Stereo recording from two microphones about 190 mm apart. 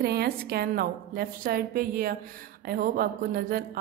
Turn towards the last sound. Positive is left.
turn(degrees=-50)  # may be behind; listen again after turning